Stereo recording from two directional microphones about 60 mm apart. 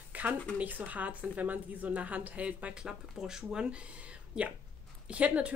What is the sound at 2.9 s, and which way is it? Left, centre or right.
Speech, centre.